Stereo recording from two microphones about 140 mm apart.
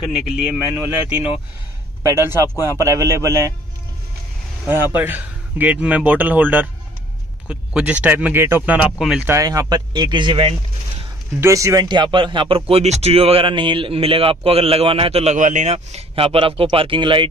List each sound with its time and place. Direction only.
0.3 s speech: 5° right (ahead or behind)
4.6 s speech: 15° right (ahead or behind)
8.9 s speech: 5° right (ahead or behind)
9.2 s speech: 20° right (ahead or behind); by 10.5 s 35° right (ahead or behind)
11.4 s speech: 20° right (ahead or behind); by 15.3 s 45° right (ahead or behind)
15.3 s speech: 60° right (ahead or behind); by 17.3 s 35° right (ahead or behind)